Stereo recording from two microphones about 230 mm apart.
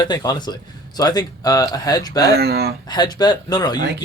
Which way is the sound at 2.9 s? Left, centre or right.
Centre.